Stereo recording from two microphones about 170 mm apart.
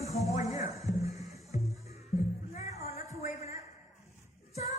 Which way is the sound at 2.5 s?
40° left (ahead or behind).